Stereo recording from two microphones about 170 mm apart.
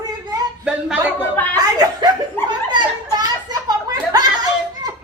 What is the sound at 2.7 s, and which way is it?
Children playing, 25° right (ahead or behind).